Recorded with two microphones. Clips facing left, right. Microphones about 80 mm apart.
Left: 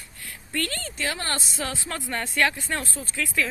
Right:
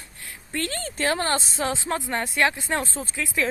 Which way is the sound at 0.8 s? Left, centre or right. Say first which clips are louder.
Right 6 dB; right.